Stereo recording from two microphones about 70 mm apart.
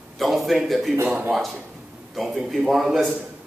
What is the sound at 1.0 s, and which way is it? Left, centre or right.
Speech, centre.